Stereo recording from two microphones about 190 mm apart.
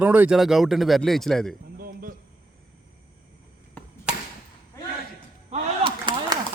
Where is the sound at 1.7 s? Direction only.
50° right (ahead or behind).